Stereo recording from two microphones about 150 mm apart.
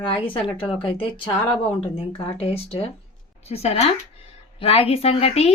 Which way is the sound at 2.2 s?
40° left (ahead or behind).